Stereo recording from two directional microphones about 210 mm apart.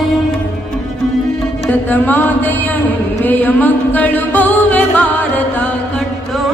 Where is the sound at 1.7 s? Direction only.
10° left (ahead or behind).